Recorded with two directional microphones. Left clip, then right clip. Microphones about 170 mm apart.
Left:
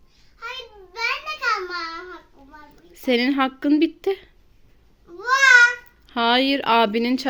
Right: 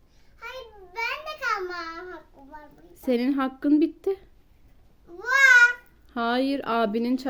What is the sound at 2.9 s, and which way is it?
A child's voice, centre (ahead or behind).